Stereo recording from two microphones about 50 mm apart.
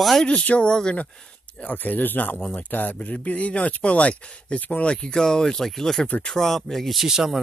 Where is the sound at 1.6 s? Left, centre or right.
Left.